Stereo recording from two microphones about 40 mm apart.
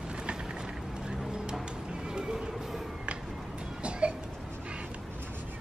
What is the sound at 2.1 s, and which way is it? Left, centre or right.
Music, centre.